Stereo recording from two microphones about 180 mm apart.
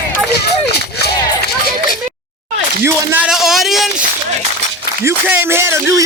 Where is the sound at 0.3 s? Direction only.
65° left (ahead or behind).